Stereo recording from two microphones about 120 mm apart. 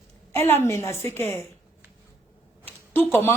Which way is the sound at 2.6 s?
15° left (ahead or behind).